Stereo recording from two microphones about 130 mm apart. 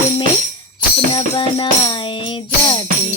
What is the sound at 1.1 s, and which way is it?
Music, 40° left (ahead or behind).